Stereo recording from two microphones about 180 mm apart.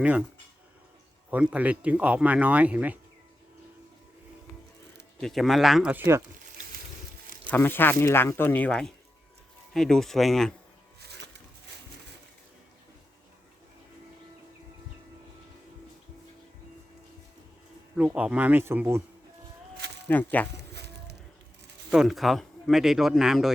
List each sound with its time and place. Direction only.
0.0 s speech: 5° right (ahead or behind)
1.3 s speech: 5° right (ahead or behind)
5.2 s speech: centre (ahead or behind)
7.4 s speech: 10° left (ahead or behind)
11.0 s a sound: 70° right (ahead or behind)
17.9 s speech: 5° right (ahead or behind)
20.1 s speech: 10° left (ahead or behind)
20.5 s music: 70° right (ahead or behind)
21.8 s speech: centre (ahead or behind)